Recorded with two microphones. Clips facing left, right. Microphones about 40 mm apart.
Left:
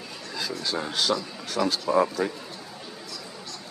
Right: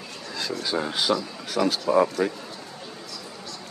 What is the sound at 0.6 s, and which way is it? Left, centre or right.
A man's voice, centre.